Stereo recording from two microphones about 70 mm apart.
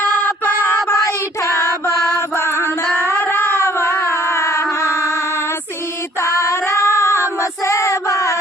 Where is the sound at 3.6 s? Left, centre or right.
Left.